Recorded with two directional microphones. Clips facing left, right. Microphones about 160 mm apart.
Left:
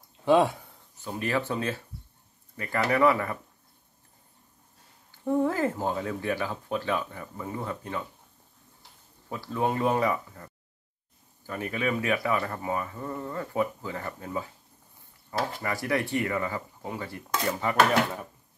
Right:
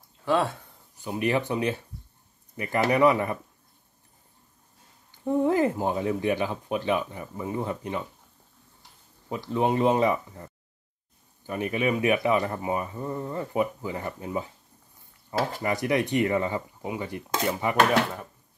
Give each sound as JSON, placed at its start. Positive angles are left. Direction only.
{"t": 0.2, "sound": "speech", "side_deg": 15}
{"t": 0.9, "sound": "speech", "side_deg": -15}
{"t": 5.2, "sound": "speech", "side_deg": -15}
{"t": 9.3, "sound": "speech", "side_deg": -20}
{"t": 15.6, "sound": "speech", "side_deg": -20}
{"t": 17.3, "sound": "dishes", "side_deg": -30}